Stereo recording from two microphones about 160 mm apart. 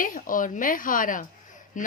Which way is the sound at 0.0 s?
60° left (ahead or behind).